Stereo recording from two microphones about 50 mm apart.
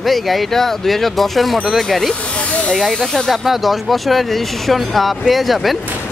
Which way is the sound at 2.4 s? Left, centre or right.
Left.